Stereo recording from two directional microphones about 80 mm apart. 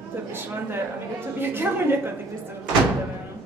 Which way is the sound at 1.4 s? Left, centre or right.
Right.